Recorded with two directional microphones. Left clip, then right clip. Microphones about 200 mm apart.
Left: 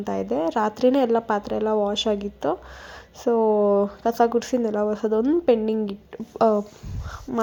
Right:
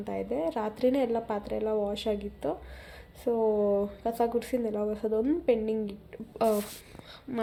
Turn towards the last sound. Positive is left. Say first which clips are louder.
# left 8 dB
turn(degrees=5)  # may be behind; listen again after turning